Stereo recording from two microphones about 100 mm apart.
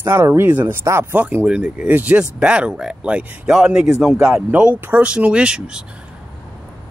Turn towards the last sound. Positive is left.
turn(degrees=-10)  # may be behind; listen again after turning